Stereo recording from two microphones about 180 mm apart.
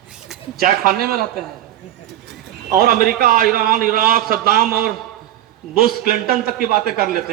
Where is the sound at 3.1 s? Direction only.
55° right (ahead or behind).